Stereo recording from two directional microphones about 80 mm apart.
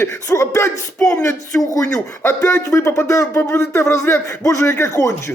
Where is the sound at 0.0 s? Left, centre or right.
Left.